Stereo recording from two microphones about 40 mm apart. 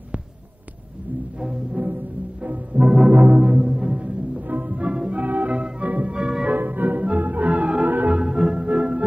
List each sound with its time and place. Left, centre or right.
1.4 s music: right
3.1 s music: right
3.5 s music: centre
3.8 s music: right
4.5 s music: right
4.7 s music: right
5.2 s music: right
6.1 s music: centre
6.5 s music: right
7.9 s music: right
8.5 s music: right